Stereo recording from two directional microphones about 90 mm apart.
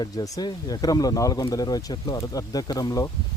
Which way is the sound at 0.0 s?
50° left (ahead or behind).